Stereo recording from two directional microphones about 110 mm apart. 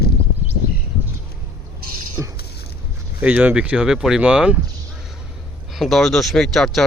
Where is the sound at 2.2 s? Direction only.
10° right (ahead or behind).